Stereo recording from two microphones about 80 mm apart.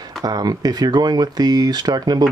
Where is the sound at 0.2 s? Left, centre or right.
Right.